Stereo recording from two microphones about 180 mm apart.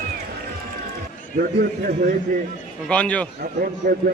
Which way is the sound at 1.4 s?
60° right (ahead or behind).